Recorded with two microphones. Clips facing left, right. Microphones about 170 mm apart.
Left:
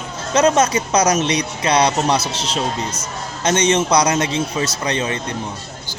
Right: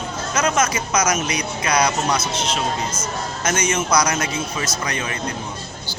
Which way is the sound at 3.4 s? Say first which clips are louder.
Left 6 dB; 30° left (ahead or behind).